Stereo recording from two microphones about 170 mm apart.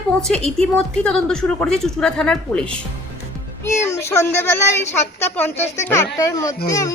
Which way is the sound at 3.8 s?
15° left (ahead or behind).